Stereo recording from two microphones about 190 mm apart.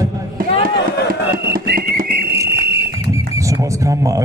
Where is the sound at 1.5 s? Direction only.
50° right (ahead or behind).